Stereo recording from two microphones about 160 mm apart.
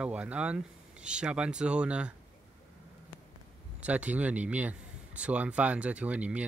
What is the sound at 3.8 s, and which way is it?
Speech, 10° right (ahead or behind).